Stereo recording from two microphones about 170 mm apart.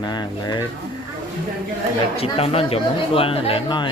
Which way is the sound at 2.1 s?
35° left (ahead or behind).